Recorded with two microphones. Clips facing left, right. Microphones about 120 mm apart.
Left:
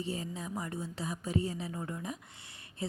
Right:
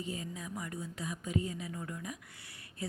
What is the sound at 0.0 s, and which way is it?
A woman's voice, 30° left (ahead or behind).